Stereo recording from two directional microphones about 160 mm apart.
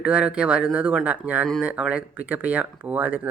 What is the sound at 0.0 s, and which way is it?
Speech, 5° right (ahead or behind).